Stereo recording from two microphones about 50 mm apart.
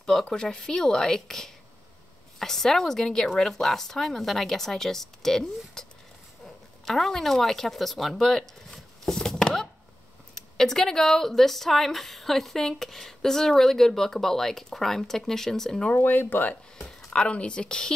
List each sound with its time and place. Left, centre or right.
0.0 s speech: centre
16.0 s speech: left
16.7 s a sound: centre
17.3 s speech: left